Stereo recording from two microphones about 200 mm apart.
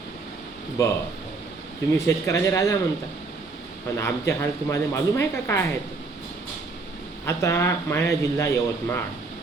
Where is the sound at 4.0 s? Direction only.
15° left (ahead or behind).